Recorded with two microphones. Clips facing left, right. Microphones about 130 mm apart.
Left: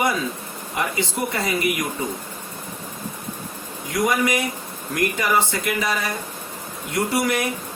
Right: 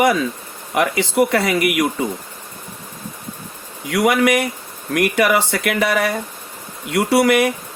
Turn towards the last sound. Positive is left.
turn(degrees=-65)  # may be behind; listen again after turning